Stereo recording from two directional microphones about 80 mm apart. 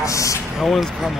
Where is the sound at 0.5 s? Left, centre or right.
Centre.